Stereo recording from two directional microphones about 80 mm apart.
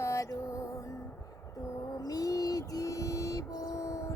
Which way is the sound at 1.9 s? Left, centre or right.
Left.